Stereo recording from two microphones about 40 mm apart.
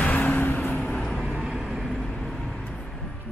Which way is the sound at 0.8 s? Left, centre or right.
Left.